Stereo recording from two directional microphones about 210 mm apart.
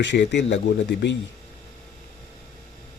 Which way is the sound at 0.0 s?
55° left (ahead or behind).